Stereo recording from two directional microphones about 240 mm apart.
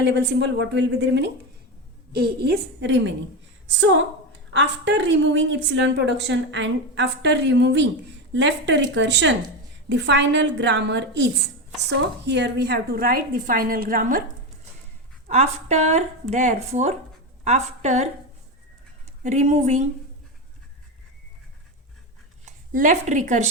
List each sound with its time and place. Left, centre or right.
0.0 s a woman's voice: right
15.3 s a woman's voice: right
19.2 s a woman's voice: right
22.4 s a woman's voice: right